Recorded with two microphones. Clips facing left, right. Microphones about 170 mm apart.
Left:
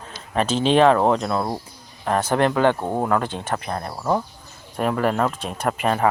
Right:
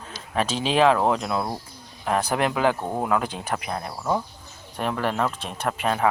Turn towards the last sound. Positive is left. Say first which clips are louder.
# left 3 dB
turn(degrees=0)  # may be behind; listen again after turning